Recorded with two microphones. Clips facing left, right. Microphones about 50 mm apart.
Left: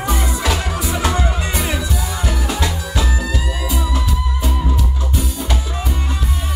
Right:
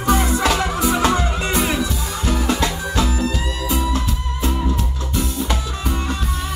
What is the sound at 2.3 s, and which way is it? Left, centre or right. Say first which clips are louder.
Music: right 4 dB; right.